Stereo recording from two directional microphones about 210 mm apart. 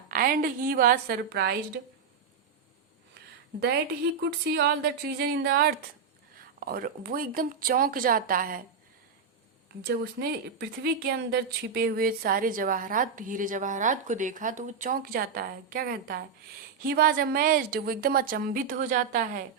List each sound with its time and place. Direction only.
0.1 s a woman's voice: 45° right (ahead or behind)
4.2 s a woman's voice: 50° right (ahead or behind)
9.8 s a woman's voice: 50° right (ahead or behind)